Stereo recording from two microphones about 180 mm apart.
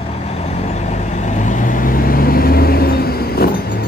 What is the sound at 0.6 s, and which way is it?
Vehicle, 40° left (ahead or behind).